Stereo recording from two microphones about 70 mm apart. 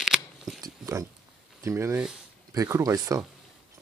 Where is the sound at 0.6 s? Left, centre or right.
Right.